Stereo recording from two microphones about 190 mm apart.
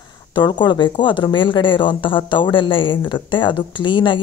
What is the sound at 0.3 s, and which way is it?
Speech, 25° left (ahead or behind).